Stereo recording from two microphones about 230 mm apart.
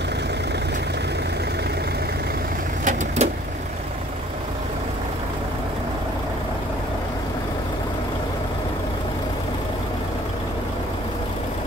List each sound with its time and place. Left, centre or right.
2.8 s vehicle: right